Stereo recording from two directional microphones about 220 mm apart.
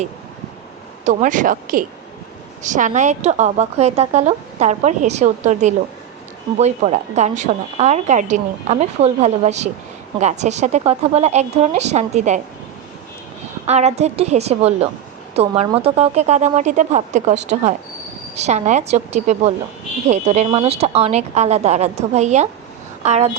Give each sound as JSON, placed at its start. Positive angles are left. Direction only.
{"t": 1.0, "sound": "a woman's voice", "side_deg": -35}
{"t": 13.7, "sound": "a woman's voice", "side_deg": -30}